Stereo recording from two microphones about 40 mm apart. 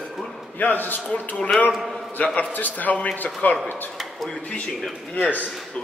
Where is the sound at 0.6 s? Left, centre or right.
Left.